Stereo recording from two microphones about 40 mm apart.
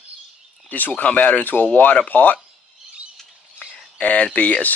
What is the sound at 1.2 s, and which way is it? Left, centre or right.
Speech, left.